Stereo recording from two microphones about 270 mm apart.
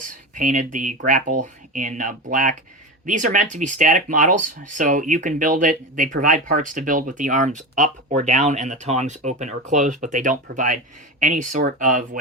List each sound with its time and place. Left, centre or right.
0.0 s speech: right